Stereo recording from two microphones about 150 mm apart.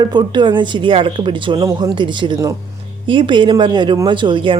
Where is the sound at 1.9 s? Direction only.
30° right (ahead or behind).